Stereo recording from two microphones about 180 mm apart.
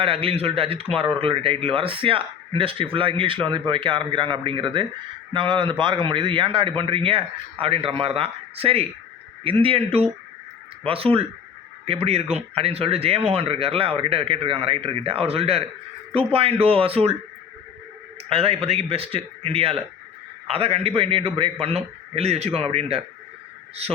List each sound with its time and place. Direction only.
0.0 s a man's voice: 30° right (ahead or behind)
18.3 s speech: 30° right (ahead or behind)